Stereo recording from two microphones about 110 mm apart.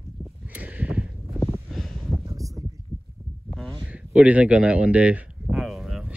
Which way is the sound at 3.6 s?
10° left (ahead or behind).